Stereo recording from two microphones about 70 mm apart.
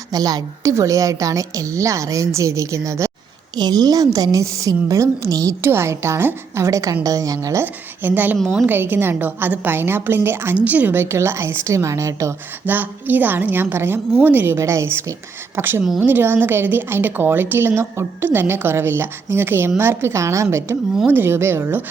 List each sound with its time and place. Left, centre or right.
0.1 s a woman's voice: right
0.7 s a woman's voice: right
3.5 s a woman's voice: right
5.6 s a woman's voice: right
7.6 s a woman's voice: right
12.6 s a woman's voice: right
15.5 s a woman's voice: right